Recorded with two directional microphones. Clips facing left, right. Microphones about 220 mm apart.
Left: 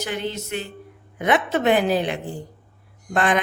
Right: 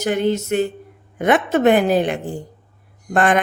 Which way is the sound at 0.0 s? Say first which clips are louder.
Right 9 dB; 45° right (ahead or behind).